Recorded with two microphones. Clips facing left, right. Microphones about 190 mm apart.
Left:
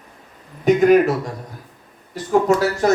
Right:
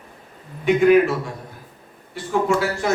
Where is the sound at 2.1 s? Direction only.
40° left (ahead or behind).